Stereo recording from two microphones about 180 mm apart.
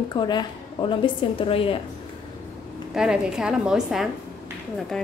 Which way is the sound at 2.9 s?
5° right (ahead or behind).